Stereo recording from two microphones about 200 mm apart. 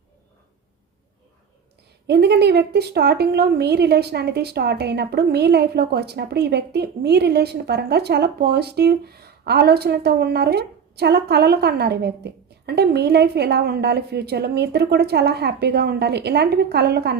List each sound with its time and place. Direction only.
2.0 s a woman's voice: 55° right (ahead or behind)